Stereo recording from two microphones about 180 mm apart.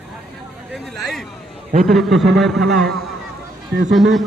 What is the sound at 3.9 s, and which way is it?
Speech, centre (ahead or behind).